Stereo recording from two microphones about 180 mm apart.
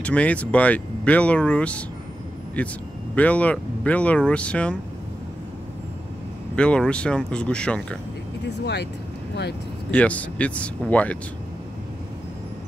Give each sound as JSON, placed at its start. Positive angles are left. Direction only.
{"t": 0.0, "sound": "speech", "side_deg": 5}
{"t": 3.2, "sound": "speech", "side_deg": 5}
{"t": 6.5, "sound": "speech", "side_deg": 5}
{"t": 8.5, "sound": "speech", "side_deg": 70}
{"t": 9.8, "sound": "speech", "side_deg": 5}